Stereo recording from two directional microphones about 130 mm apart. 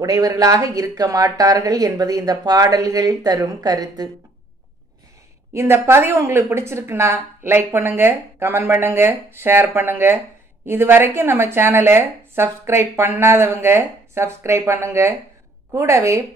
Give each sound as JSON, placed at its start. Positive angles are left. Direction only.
{"t": 0.0, "sound": "speech", "side_deg": -30}
{"t": 5.5, "sound": "speech", "side_deg": -20}